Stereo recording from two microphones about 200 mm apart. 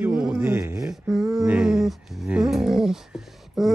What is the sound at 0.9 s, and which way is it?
Roaring cats, centre (ahead or behind).